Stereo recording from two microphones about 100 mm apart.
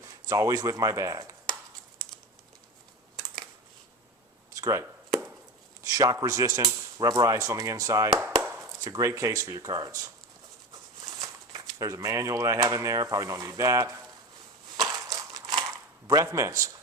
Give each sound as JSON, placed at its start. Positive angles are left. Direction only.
{"t": 0.0, "sound": "speech", "side_deg": -30}
{"t": 4.5, "sound": "chop", "side_deg": -30}
{"t": 5.8, "sound": "speech", "side_deg": -35}
{"t": 11.0, "sound": "a sound", "side_deg": -40}
{"t": 11.8, "sound": "speech", "side_deg": -35}
{"t": 14.8, "sound": "a sound", "side_deg": -40}
{"t": 16.2, "sound": "a man's voice", "side_deg": -30}